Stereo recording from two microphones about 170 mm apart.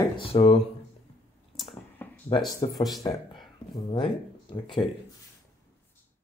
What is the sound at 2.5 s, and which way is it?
Stir, 20° left (ahead or behind).